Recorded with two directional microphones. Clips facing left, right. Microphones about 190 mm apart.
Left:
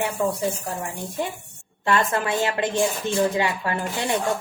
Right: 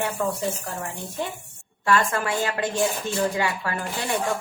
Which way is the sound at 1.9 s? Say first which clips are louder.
Left 1 dB; 20° left (ahead or behind).